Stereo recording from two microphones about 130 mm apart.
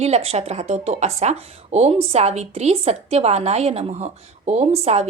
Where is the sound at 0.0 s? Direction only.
50° right (ahead or behind).